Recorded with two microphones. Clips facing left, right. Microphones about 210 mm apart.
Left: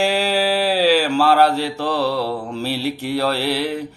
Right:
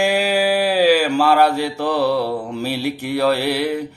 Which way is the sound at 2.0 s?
50° right (ahead or behind).